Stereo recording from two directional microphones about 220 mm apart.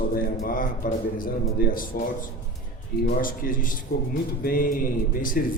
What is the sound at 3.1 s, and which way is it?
A man's voice, 40° left (ahead or behind).